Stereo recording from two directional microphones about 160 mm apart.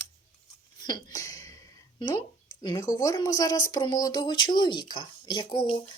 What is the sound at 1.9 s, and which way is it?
Speech, 25° left (ahead or behind).